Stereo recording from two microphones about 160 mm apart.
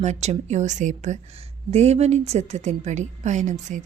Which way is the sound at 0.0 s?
45° right (ahead or behind).